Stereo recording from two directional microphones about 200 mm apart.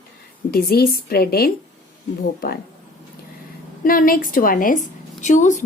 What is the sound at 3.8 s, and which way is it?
A woman's voice, 45° left (ahead or behind).